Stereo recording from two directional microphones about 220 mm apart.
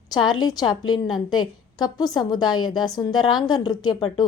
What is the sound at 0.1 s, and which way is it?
A woman's voice, 20° left (ahead or behind).